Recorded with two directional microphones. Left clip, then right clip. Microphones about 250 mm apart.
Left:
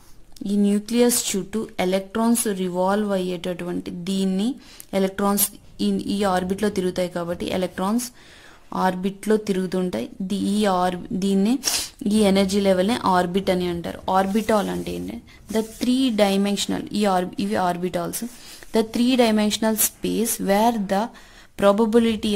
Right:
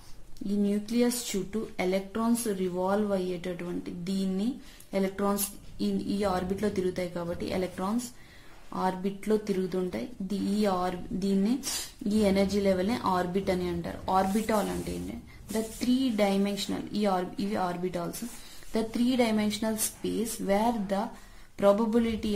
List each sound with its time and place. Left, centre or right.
0.6 s speech: left